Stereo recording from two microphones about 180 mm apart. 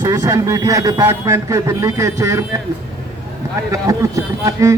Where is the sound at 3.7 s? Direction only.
20° right (ahead or behind).